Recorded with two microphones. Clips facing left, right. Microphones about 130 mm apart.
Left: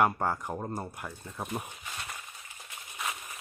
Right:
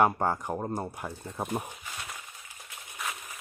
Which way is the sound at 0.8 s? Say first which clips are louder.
Right 4 dB; 25° right (ahead or behind).